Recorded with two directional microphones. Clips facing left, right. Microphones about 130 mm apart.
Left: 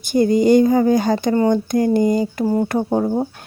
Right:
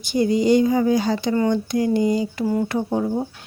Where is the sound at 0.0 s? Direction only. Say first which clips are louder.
Left 4 dB; 50° left (ahead or behind).